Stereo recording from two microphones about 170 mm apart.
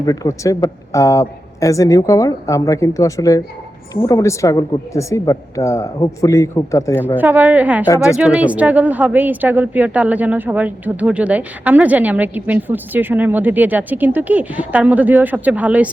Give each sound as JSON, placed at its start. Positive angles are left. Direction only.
{"t": 0.0, "sound": "speech", "side_deg": 20}
{"t": 7.2, "sound": "speech", "side_deg": -10}